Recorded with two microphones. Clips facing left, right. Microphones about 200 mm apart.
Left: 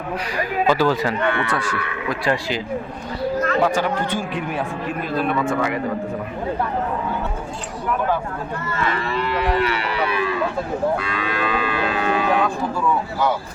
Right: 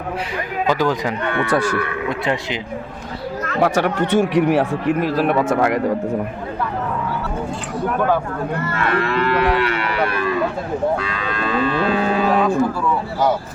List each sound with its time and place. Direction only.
0.7 s speech: 15° right (ahead or behind)
3.6 s speech: 70° right (ahead or behind)
8.7 s cattle: 65° right (ahead or behind); by 10.3 s 50° right (ahead or behind)
11.3 s cattle: 10° left (ahead or behind)